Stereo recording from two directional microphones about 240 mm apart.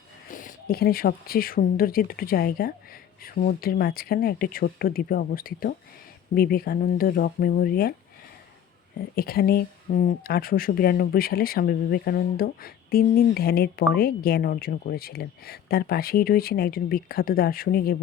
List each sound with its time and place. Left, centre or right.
0.3 s speech: left
9.1 s speech: left